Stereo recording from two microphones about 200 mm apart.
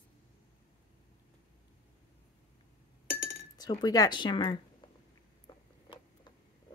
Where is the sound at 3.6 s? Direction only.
20° left (ahead or behind).